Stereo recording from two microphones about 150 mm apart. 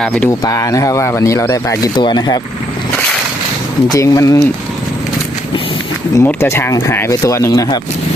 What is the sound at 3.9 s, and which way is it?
Speech, 20° left (ahead or behind).